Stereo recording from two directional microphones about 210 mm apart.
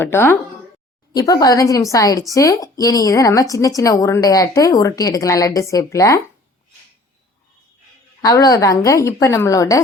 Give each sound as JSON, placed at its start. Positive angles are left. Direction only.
{"t": 0.0, "sound": "a woman's voice", "side_deg": 10}
{"t": 8.2, "sound": "a woman's voice", "side_deg": 15}